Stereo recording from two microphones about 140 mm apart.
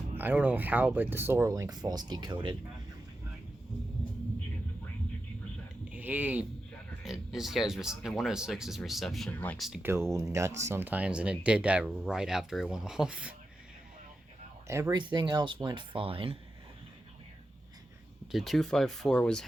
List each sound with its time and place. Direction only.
0.2 s speech: 10° right (ahead or behind); by 2.6 s 35° right (ahead or behind)
5.9 s speech: 10° right (ahead or behind)
9.8 s speech: 20° right (ahead or behind)
14.7 s speech: 20° right (ahead or behind)
14.9 s speech: 35° right (ahead or behind)
18.3 s speech: centre (ahead or behind)